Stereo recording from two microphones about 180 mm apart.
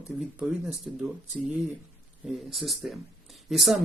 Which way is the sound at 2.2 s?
Centre (ahead or behind).